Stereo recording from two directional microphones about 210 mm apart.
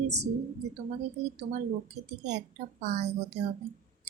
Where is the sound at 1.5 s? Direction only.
35° right (ahead or behind).